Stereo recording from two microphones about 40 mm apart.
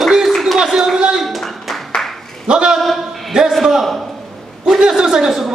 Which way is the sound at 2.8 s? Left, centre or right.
Centre.